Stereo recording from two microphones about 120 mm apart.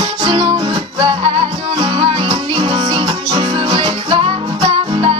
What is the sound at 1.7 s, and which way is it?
Music, 45° right (ahead or behind).